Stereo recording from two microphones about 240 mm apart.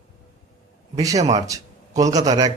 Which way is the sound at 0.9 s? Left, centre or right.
Centre.